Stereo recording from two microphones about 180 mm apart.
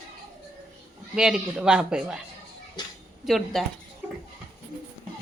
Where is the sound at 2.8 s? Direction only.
25° left (ahead or behind).